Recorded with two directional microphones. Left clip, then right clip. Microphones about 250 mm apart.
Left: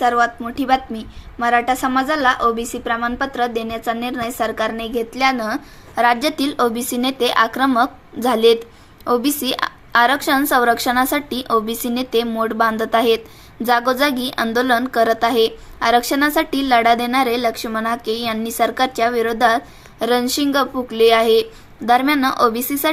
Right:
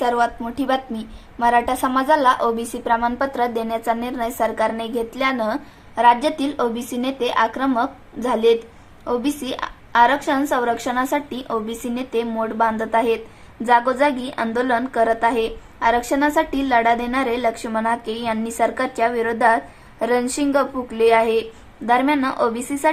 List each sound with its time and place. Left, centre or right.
0.0 s a woman's voice: centre